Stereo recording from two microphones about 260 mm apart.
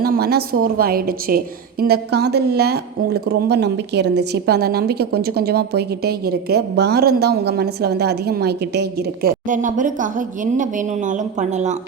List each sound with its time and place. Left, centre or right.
0.0 s a woman's voice: right